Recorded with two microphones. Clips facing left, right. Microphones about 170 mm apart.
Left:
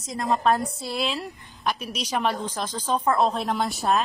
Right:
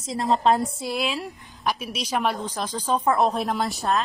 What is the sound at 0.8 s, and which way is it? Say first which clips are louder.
A woman's voice: right 1 dB; 5° right (ahead or behind).